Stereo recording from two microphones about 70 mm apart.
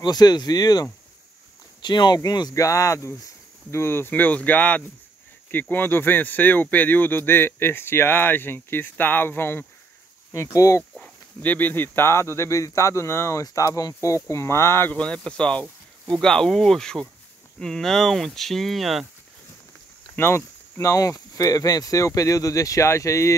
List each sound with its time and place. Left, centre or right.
0.0 s speech: left
1.8 s speech: left
2.5 s speech: left
10.3 s speech: left
11.4 s speech: left
14.9 s speech: centre
20.2 s speech: left